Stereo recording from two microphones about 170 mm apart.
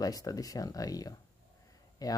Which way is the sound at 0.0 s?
20° left (ahead or behind).